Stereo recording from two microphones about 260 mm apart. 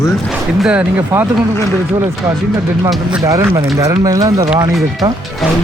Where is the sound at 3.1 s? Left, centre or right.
Centre.